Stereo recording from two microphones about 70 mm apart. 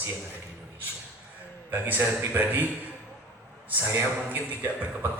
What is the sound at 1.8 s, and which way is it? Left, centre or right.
Speech, right.